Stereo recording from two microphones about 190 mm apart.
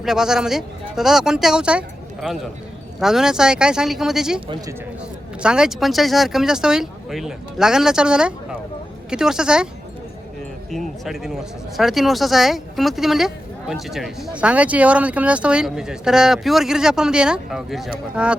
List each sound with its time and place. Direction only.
0.0 s speech: centre (ahead or behind)
4.4 s speech: 25° right (ahead or behind)
5.4 s speech: 5° right (ahead or behind)
10.7 s speech: centre (ahead or behind)